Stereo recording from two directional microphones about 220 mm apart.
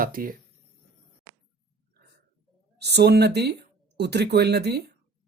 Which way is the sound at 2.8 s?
50° right (ahead or behind).